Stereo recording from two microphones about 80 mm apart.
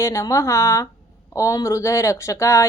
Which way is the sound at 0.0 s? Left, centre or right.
Left.